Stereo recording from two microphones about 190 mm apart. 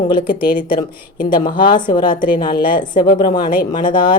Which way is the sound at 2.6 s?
25° left (ahead or behind).